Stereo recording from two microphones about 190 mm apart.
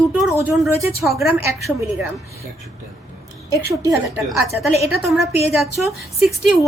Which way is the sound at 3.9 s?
15° right (ahead or behind).